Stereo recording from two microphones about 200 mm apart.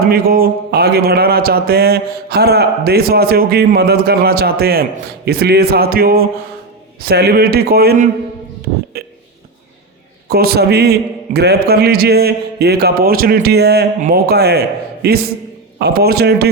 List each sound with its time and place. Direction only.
0.1 s speech: 50° right (ahead or behind)
8.9 s a sound: 50° right (ahead or behind)
10.2 s speech: 50° right (ahead or behind)